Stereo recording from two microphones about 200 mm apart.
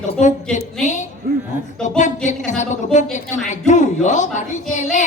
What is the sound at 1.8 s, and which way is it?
Speech, 35° left (ahead or behind).